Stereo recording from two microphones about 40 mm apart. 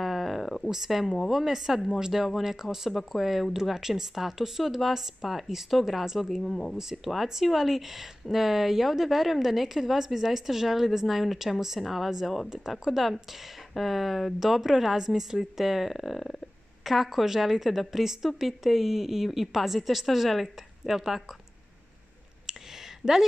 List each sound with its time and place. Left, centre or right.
0.0 s a sound: centre
0.7 s speech: centre
1.0 s speech: centre
1.3 s speech: centre
2.9 s speech: centre
6.4 s speech: centre
6.9 s speech: centre